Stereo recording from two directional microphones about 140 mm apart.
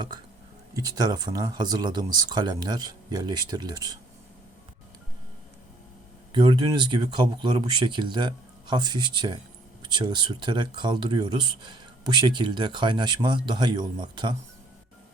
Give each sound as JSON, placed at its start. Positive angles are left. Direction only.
{"t": 0.7, "sound": "speech", "side_deg": -25}
{"t": 6.3, "sound": "speech", "side_deg": -35}